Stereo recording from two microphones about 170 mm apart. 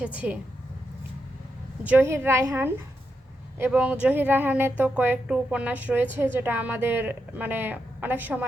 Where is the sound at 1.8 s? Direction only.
10° right (ahead or behind).